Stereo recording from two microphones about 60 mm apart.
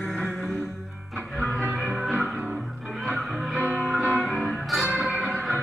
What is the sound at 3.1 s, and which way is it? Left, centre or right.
Music, right.